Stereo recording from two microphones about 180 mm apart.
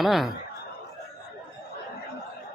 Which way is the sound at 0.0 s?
Centre (ahead or behind).